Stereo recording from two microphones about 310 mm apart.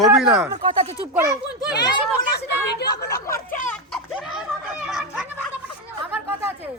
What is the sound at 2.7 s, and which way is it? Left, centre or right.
Speech, left.